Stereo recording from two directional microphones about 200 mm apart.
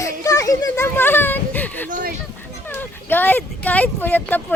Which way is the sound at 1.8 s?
40° right (ahead or behind).